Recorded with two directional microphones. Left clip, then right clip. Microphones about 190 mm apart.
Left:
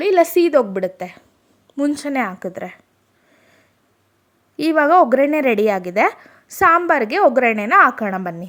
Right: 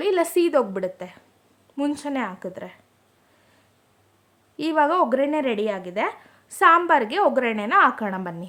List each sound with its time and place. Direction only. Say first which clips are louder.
0.0 s a woman's voice: left 6 dB; 20° left (ahead or behind)
4.5 s a woman's voice: left 7 dB; 25° left (ahead or behind)